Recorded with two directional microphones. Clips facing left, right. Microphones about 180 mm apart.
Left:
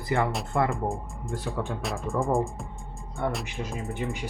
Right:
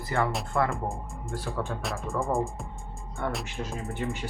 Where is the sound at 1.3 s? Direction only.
20° left (ahead or behind).